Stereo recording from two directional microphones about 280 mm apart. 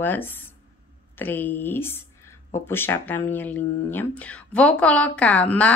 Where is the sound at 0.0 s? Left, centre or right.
Centre.